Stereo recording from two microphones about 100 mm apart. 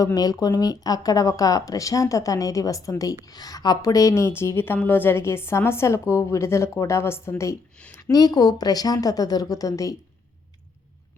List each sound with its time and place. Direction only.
0.0 s a woman's voice: 40° left (ahead or behind)
7.8 s a sound: 15° left (ahead or behind)
8.1 s speech: 40° left (ahead or behind)